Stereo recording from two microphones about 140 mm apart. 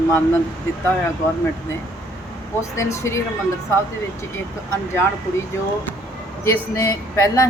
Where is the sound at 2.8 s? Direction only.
20° left (ahead or behind).